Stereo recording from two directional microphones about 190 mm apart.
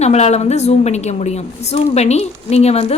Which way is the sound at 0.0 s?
35° left (ahead or behind).